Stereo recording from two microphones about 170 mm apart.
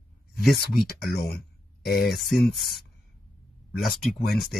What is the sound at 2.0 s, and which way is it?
Speech, centre (ahead or behind).